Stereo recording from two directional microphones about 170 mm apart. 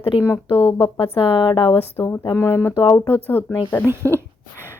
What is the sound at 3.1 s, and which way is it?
Speech, 10° left (ahead or behind).